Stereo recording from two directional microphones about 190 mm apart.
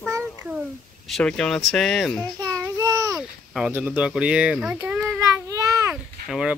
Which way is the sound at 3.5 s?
5° right (ahead or behind).